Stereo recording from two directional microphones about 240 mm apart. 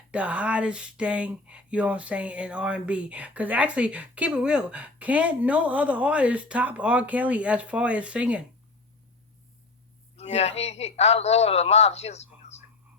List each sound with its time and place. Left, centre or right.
0.1 s speech: centre
10.2 s a man's voice: left